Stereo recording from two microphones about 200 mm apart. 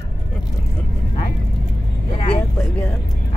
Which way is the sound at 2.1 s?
30° left (ahead or behind).